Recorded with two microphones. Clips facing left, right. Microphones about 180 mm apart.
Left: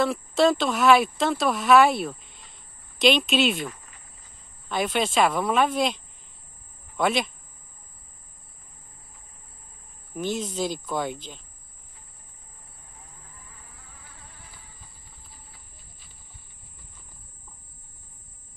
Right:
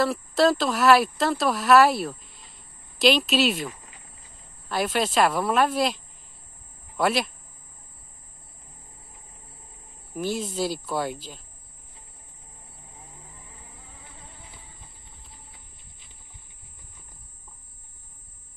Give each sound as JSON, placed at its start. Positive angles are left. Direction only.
{"t": 0.0, "sound": "speech", "side_deg": 0}
{"t": 7.0, "sound": "speech", "side_deg": -5}
{"t": 10.1, "sound": "speech", "side_deg": -5}
{"t": 13.2, "sound": "insect", "side_deg": -20}